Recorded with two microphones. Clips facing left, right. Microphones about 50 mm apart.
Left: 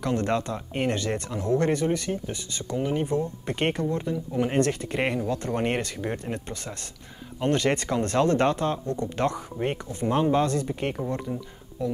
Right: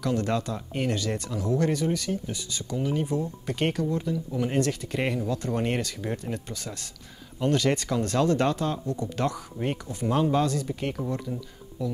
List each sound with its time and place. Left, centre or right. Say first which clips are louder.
0.0 s speech: left 1 dB; left
7.3 s speech: even; left
11.8 s speech: left 3 dB; left